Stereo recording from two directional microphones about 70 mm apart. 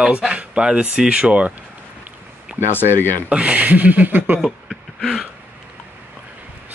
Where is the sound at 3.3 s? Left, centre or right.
Centre.